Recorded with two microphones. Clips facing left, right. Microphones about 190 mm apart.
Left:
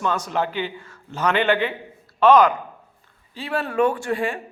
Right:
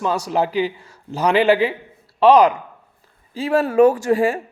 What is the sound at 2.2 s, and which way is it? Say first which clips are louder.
A man's voice: right 2 dB; 35° right (ahead or behind).